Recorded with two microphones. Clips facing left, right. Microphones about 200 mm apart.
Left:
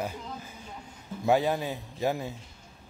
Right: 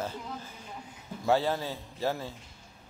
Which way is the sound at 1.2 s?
15° left (ahead or behind).